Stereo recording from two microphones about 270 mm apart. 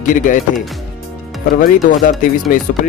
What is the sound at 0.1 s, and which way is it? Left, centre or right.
Speech, left.